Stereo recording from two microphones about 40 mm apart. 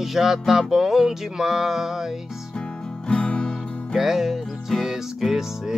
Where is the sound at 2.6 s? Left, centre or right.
Left.